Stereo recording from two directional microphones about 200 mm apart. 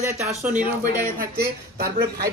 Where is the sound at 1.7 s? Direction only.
50° right (ahead or behind).